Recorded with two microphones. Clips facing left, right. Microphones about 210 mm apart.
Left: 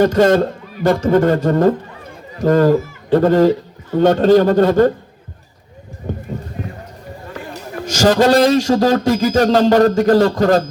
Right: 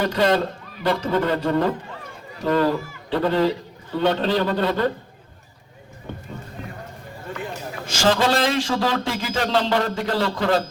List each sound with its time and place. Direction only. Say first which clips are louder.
0.0 s a man's voice: left 8 dB; 45° left (ahead or behind)
6.0 s a sound: left 9 dB; 40° left (ahead or behind)
7.9 s a man's voice: left 7 dB; 40° left (ahead or behind)